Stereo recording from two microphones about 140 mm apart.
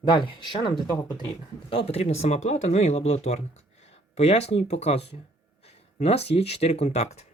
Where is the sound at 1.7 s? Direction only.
45° left (ahead or behind).